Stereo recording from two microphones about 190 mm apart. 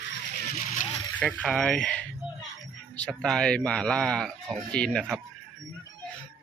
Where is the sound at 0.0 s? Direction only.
65° left (ahead or behind); by 0.9 s 45° left (ahead or behind).